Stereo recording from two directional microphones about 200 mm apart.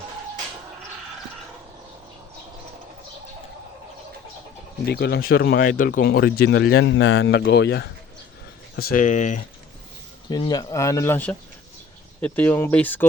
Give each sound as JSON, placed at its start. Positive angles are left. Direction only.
{"t": 4.9, "sound": "speech", "side_deg": 55}
{"t": 10.2, "sound": "speech", "side_deg": 20}